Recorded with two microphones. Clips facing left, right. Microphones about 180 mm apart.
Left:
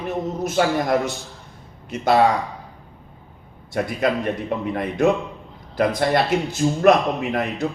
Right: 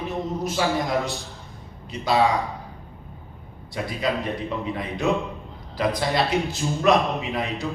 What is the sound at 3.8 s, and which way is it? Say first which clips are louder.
A man's voice: left 4 dB; 60° left (ahead or behind).